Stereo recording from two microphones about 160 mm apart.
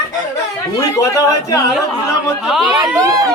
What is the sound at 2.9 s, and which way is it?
Speech, 20° right (ahead or behind).